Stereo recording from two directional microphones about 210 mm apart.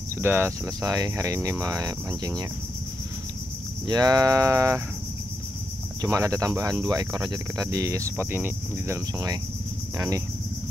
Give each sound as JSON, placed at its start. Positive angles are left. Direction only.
{"t": 0.2, "sound": "speech", "side_deg": -10}
{"t": 3.8, "sound": "speech", "side_deg": -20}
{"t": 5.9, "sound": "speech", "side_deg": -15}